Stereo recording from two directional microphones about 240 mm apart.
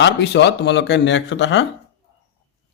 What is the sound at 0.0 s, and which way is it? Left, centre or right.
Speech, left.